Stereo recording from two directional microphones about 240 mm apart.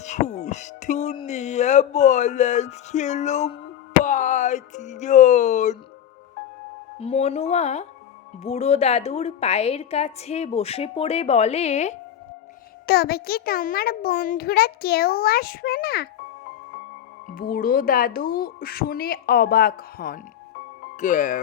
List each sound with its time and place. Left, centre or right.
0.0 s speech: left
7.0 s speech: left
12.9 s a child's voice: left
17.2 s a child's voice: left